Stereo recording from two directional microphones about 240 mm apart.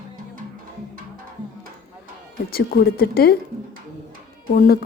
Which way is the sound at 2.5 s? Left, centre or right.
Left.